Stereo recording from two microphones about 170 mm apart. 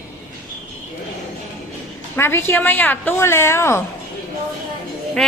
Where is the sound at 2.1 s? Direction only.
15° left (ahead or behind).